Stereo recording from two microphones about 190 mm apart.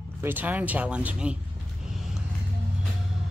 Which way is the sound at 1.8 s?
Centre (ahead or behind).